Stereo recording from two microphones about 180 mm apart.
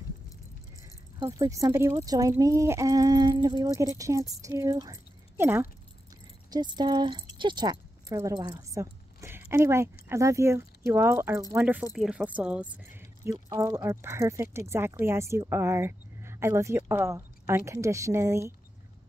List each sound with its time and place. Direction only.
1.2 s speech: 20° right (ahead or behind)
6.5 s speech: 25° right (ahead or behind)